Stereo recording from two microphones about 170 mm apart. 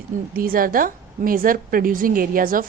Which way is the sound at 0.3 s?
60° right (ahead or behind).